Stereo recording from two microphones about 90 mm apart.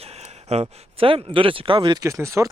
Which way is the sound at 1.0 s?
90° right.